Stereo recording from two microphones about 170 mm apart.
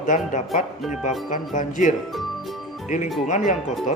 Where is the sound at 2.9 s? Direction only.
45° left (ahead or behind).